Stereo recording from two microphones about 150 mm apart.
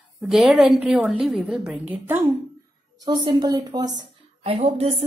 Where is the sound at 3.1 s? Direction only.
30° right (ahead or behind).